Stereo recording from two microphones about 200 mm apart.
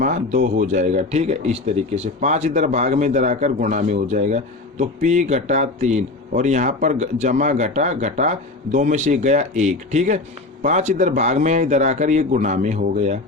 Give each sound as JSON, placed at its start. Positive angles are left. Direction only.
{"t": 0.0, "sound": "a man's voice", "side_deg": -40}